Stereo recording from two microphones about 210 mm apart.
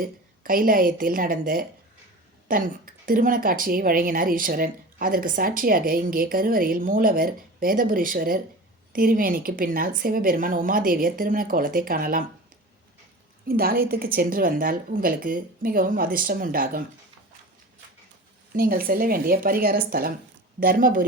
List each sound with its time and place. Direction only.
0.0 s a woman's voice: 40° right (ahead or behind)
13.5 s a woman's voice: 45° right (ahead or behind)
18.5 s a woman's voice: 45° right (ahead or behind)